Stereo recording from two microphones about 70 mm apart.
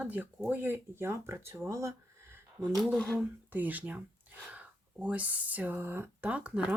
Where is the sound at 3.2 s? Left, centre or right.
Right.